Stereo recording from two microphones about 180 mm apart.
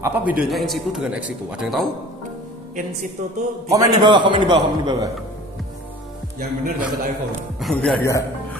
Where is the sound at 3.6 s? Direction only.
20° right (ahead or behind).